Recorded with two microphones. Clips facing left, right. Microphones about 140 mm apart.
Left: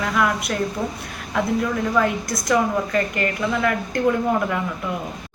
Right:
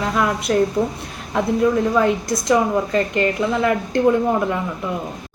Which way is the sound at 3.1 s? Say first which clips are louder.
Right 4 dB; 25° right (ahead or behind).